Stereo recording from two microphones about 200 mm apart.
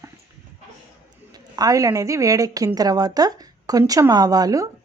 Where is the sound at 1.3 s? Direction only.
20° right (ahead or behind).